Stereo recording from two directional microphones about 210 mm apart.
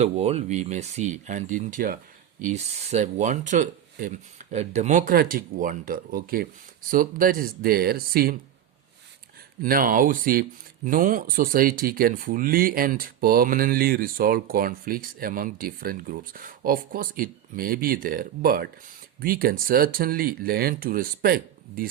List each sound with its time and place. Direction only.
0.0 s speech: 30° right (ahead or behind); by 8.4 s 45° right (ahead or behind)
9.6 s speech: 40° right (ahead or behind)